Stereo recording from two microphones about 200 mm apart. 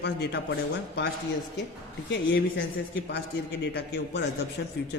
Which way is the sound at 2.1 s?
60° left (ahead or behind).